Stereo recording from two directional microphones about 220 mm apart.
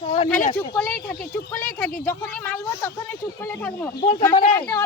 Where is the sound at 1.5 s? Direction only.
40° left (ahead or behind).